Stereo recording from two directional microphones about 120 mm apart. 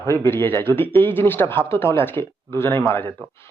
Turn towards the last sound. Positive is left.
turn(degrees=20)  # may be behind; listen again after turning